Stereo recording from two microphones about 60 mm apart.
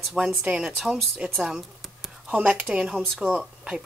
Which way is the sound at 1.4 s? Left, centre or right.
Centre.